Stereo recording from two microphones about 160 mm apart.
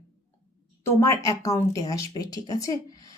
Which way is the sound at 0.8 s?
20° left (ahead or behind).